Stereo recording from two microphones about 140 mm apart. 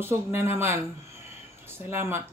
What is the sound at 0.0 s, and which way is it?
Speech, 15° right (ahead or behind).